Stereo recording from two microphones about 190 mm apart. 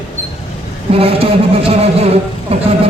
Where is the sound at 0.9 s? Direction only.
30° right (ahead or behind).